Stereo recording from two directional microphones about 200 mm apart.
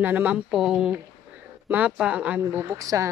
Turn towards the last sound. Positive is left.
turn(degrees=-15)  # may be behind; listen again after turning